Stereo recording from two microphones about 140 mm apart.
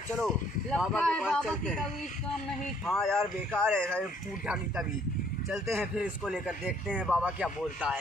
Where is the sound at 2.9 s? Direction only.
5° left (ahead or behind).